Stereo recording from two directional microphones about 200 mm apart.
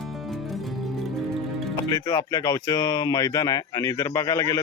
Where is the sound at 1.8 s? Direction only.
15° left (ahead or behind).